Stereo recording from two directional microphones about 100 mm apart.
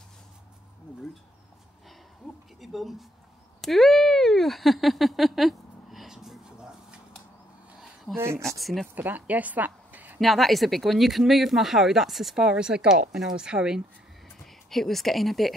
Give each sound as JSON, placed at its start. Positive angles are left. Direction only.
{"t": 2.6, "sound": "speech", "side_deg": 0}
{"t": 3.6, "sound": "a sound", "side_deg": 0}
{"t": 8.4, "sound": "speech", "side_deg": 0}
{"t": 8.9, "sound": "a woman's voice", "side_deg": -15}
{"t": 10.2, "sound": "speech", "side_deg": 0}
{"t": 14.4, "sound": "a woman's voice", "side_deg": 5}